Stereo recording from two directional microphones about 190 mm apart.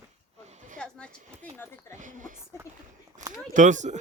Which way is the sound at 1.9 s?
40° right (ahead or behind).